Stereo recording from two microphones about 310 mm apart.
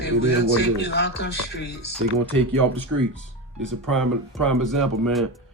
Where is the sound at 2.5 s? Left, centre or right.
Right.